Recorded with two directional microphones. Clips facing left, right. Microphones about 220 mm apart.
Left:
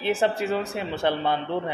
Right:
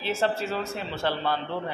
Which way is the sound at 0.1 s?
15° left (ahead or behind).